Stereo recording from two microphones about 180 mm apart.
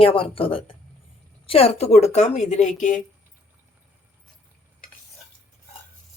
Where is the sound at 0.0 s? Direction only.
30° left (ahead or behind).